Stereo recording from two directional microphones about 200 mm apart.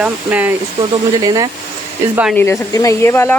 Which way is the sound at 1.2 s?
20° right (ahead or behind).